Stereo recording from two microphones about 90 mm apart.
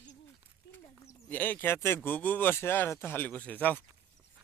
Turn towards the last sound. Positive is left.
turn(degrees=20)  # may be behind; listen again after turning